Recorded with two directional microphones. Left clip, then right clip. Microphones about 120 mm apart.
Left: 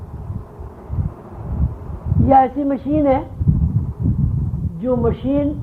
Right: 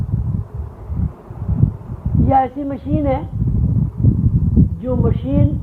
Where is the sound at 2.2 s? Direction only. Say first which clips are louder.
Left 3 dB; 30° right (ahead or behind).